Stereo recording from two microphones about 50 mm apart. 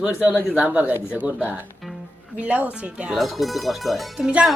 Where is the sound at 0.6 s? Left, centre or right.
Right.